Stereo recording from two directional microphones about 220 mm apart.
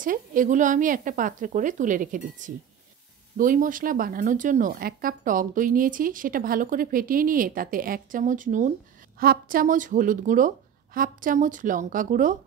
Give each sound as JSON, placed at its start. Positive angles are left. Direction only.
{"t": 0.0, "sound": "speech", "side_deg": -40}